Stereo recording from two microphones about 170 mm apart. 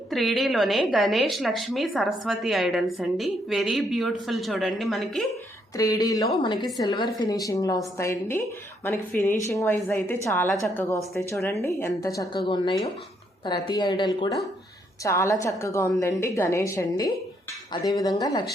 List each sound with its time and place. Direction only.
0.1 s a woman's voice: centre (ahead or behind)
5.7 s a woman's voice: 20° left (ahead or behind)